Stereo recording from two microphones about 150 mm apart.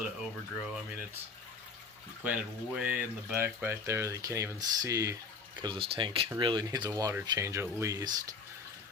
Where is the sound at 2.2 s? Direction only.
10° right (ahead or behind).